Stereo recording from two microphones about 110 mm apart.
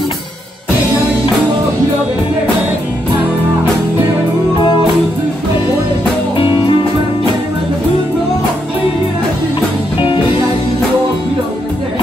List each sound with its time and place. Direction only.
6.3 s music: 50° left (ahead or behind)